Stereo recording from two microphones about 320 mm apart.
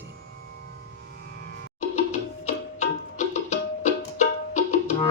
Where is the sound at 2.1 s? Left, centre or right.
Left.